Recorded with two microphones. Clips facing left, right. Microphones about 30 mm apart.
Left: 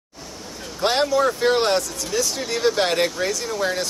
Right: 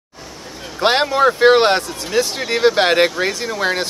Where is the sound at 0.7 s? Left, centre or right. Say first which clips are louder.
Right 4 dB; right.